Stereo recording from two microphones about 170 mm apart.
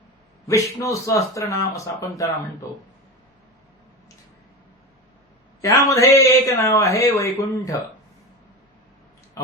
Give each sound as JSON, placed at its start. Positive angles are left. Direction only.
{"t": 0.4, "sound": "speech", "side_deg": 20}
{"t": 5.6, "sound": "a man's voice", "side_deg": 20}